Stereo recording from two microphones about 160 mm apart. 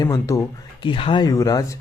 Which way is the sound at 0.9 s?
30° left (ahead or behind).